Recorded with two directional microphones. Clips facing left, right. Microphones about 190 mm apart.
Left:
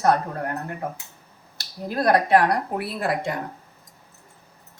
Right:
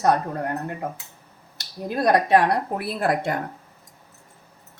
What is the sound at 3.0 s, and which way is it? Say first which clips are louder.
Speech: right 3 dB; 50° right (ahead or behind).